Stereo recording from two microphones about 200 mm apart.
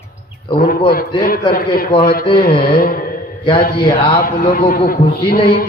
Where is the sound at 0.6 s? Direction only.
45° left (ahead or behind).